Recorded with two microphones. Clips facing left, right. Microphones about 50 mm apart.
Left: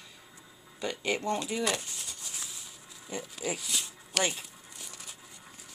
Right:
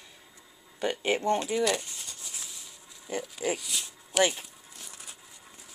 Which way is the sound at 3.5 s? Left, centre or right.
Centre.